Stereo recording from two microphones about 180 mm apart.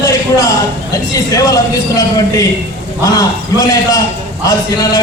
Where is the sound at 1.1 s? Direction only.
20° left (ahead or behind).